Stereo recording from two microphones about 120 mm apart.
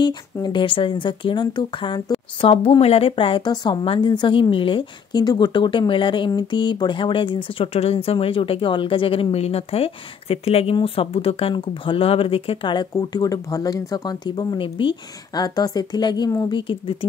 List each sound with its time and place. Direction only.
0.0 s speech: 40° left (ahead or behind)
12.9 s speech: 30° left (ahead or behind)
16.5 s speech: 45° left (ahead or behind)